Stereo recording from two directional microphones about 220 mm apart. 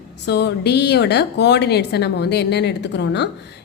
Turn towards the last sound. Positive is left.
turn(degrees=50)  # may be behind; listen again after turning